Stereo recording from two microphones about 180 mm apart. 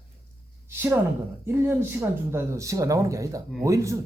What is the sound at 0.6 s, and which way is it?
A woman's voice, 10° right (ahead or behind).